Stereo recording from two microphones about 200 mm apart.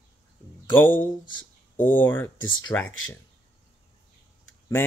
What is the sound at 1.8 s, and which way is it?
Speech, 10° left (ahead or behind).